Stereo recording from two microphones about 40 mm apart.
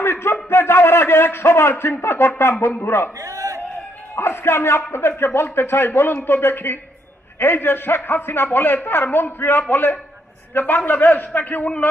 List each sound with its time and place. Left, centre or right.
0.0 s a man's voice: left
4.2 s a man's voice: left